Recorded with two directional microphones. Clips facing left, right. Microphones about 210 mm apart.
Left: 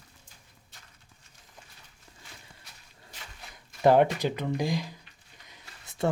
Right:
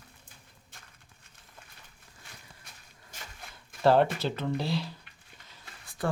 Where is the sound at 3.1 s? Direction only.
45° right (ahead or behind).